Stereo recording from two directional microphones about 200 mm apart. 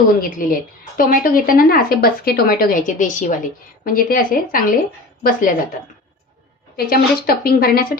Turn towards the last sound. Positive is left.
turn(degrees=50)  # may be behind; listen again after turning